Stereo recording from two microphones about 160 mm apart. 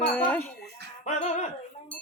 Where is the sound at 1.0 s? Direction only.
45° left (ahead or behind).